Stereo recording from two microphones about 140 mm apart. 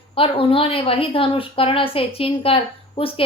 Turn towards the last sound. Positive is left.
turn(degrees=40)  # may be behind; listen again after turning